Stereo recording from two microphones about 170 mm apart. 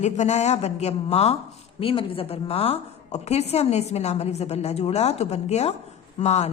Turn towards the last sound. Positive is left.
turn(degrees=40)  # may be behind; listen again after turning